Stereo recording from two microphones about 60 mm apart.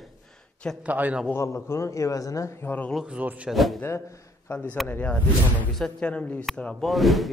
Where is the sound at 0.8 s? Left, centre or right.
Right.